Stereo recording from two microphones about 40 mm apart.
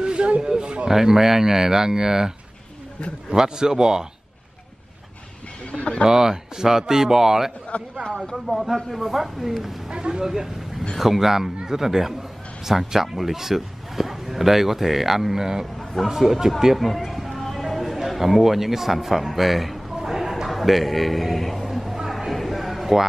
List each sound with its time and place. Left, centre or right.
0.0 s a sound: right
0.8 s a man's voice: centre
5.7 s speech: left
6.0 s a man's voice: centre
7.7 s speech: left
8.5 s speech: centre
9.8 s a man's voice: centre
15.8 s a sound: centre
16.1 s music: centre
22.1 s a sound: centre